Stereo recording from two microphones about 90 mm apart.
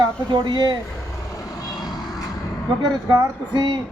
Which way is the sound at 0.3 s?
55° right (ahead or behind).